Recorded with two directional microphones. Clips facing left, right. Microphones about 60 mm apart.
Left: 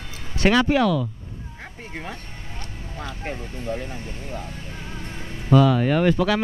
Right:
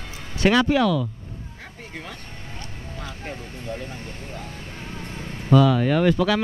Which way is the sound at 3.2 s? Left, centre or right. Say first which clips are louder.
Left 3 dB; left.